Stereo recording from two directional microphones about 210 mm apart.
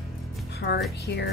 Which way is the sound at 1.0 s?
55° left (ahead or behind).